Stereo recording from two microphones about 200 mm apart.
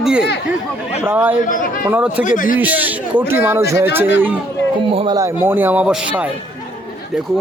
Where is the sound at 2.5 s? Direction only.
10° right (ahead or behind).